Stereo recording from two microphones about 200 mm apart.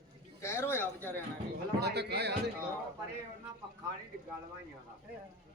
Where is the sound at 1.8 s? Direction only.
55° right (ahead or behind).